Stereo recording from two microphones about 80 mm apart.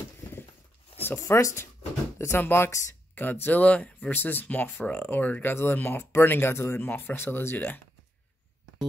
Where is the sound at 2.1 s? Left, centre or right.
Left.